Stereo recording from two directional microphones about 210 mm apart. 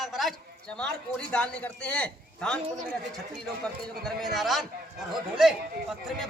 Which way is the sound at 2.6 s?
35° right (ahead or behind).